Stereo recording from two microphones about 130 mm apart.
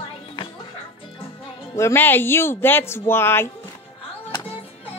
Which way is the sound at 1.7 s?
20° left (ahead or behind).